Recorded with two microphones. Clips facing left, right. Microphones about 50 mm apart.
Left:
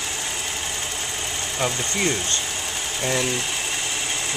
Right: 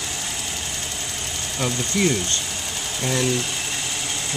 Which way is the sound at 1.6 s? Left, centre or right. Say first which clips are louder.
Right 2 dB; centre.